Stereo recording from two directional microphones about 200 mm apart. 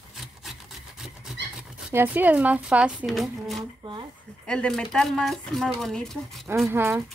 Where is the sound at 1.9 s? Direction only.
10° right (ahead or behind).